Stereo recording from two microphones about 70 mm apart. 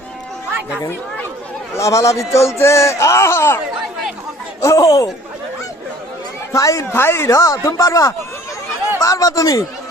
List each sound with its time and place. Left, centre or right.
1.7 s speech: left
4.6 s speech: left
6.5 s speech: left
6.9 s speech: left
7.3 s speech: left